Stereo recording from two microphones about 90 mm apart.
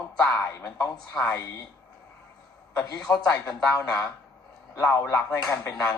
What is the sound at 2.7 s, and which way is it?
Speech, 20° left (ahead or behind).